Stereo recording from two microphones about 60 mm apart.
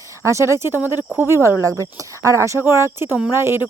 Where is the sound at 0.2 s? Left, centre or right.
Right.